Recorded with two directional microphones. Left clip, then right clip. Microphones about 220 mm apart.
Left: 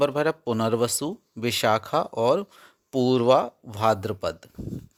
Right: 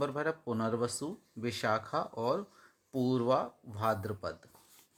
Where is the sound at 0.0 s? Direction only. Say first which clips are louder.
Left 11 dB; 40° left (ahead or behind).